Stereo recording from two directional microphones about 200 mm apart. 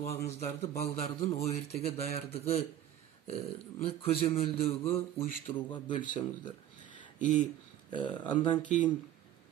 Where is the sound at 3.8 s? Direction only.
30° left (ahead or behind).